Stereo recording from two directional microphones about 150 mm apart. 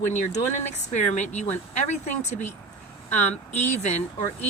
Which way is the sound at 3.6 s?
50° left (ahead or behind).